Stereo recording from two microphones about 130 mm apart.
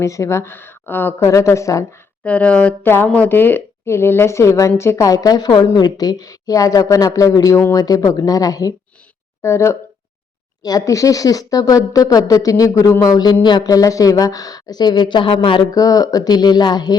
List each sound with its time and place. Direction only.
0.0 s speech: 20° left (ahead or behind)
2.2 s a woman's voice: 10° left (ahead or behind); by 17.0 s 30° left (ahead or behind)